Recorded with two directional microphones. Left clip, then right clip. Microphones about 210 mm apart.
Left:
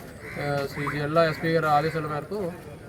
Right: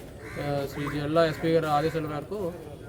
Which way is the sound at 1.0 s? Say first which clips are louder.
Left 1 dB; centre (ahead or behind).